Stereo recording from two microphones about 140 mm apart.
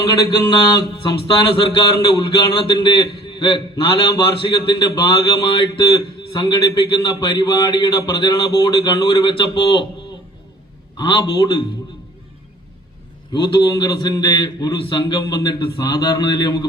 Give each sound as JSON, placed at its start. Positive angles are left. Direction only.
{"t": 0.0, "sound": "speech", "side_deg": 25}
{"t": 10.9, "sound": "speech", "side_deg": 35}
{"t": 13.3, "sound": "speech", "side_deg": 35}